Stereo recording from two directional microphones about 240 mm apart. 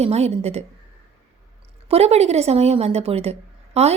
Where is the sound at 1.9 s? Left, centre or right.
Right.